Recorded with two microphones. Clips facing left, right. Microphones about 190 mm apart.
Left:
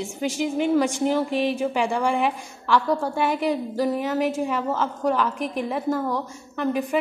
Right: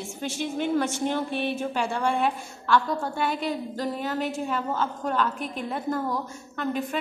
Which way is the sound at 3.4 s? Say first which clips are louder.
Left 6 dB; 10° left (ahead or behind).